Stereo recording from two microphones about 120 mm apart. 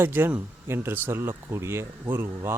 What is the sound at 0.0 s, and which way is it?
Speech, 15° right (ahead or behind).